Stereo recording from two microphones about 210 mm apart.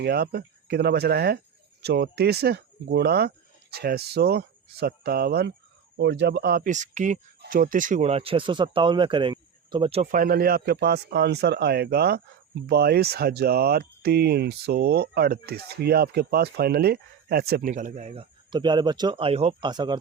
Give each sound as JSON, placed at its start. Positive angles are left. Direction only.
{"t": 0.0, "sound": "speech", "side_deg": -50}